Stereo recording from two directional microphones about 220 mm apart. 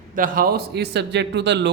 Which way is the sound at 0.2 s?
40° right (ahead or behind).